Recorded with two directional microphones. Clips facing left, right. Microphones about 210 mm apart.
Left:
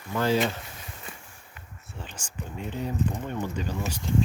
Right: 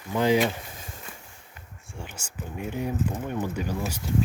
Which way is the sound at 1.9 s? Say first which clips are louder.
Right 1 dB; 10° right (ahead or behind).